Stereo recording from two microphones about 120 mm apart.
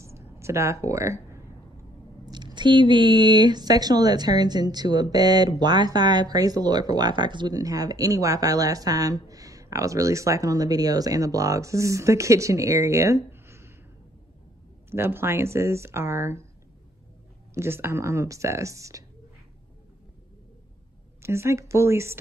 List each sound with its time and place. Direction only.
0.0 s speech: 25° right (ahead or behind)
2.3 s a woman's voice: 40° right (ahead or behind); by 13.7 s 20° right (ahead or behind)
14.9 s speech: 20° right (ahead or behind)
17.6 s speech: 20° right (ahead or behind)
21.2 s speech: 20° right (ahead or behind)